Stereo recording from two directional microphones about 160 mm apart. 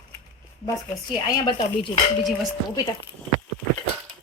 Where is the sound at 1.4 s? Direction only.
30° left (ahead or behind).